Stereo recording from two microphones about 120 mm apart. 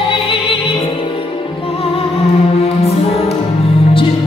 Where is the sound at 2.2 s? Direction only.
55° left (ahead or behind).